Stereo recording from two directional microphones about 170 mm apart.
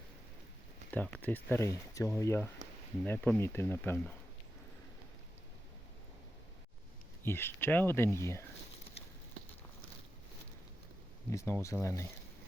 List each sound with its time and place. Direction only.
0.9 s speech: 10° left (ahead or behind)
7.3 s speech: 15° left (ahead or behind)
11.3 s speech: 15° left (ahead or behind)